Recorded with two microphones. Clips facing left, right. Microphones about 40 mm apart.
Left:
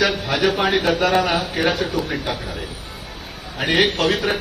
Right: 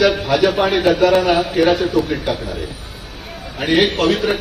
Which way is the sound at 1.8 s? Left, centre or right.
Left.